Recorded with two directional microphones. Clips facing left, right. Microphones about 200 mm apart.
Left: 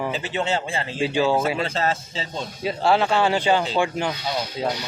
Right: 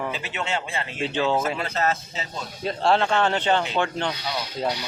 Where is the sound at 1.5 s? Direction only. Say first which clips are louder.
Left 1 dB; 30° left (ahead or behind).